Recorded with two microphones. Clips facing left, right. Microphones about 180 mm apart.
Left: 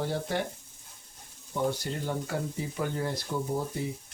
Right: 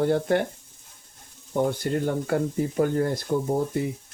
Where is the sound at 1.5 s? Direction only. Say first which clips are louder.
Right 6 dB; 55° right (ahead or behind).